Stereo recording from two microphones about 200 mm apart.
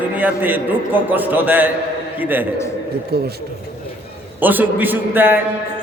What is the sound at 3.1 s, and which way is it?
Speech, 55° right (ahead or behind).